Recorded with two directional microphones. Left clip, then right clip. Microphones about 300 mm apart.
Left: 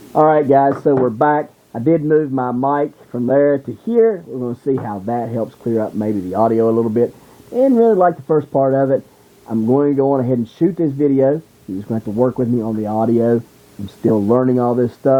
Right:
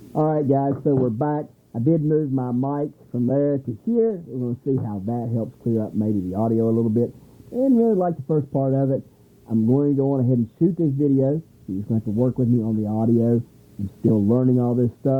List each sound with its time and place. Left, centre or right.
0.1 s speech: centre